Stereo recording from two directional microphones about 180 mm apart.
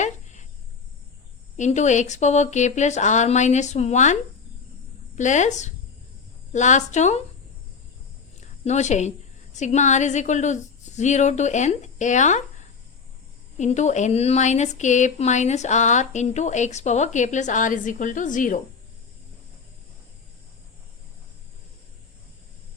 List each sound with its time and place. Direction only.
0.0 s cricket: 40° left (ahead or behind)
1.5 s speech: 40° left (ahead or behind)
8.6 s speech: 40° left (ahead or behind)
13.6 s speech: 40° left (ahead or behind)